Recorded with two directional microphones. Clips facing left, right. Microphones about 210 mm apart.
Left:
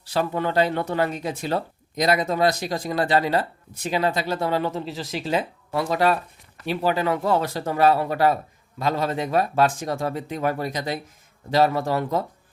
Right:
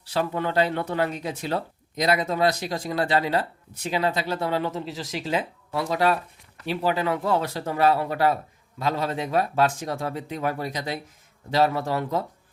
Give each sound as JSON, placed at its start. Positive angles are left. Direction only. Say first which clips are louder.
{"t": 0.1, "sound": "speech", "louder": "left 2 dB", "side_deg": 40}